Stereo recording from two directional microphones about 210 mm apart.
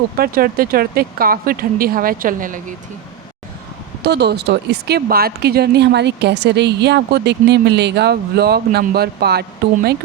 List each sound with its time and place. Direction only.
0.2 s speech: 45° right (ahead or behind)
4.0 s speech: 50° right (ahead or behind)